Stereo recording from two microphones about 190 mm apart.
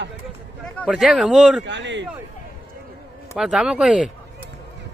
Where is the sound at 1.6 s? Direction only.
70° right (ahead or behind).